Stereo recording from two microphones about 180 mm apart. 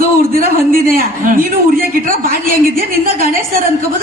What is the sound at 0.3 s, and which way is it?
A man's voice, 50° right (ahead or behind).